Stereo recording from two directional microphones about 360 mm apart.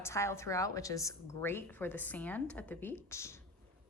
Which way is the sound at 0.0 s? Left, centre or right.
Centre.